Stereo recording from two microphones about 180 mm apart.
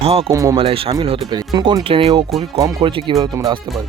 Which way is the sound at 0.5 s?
30° right (ahead or behind).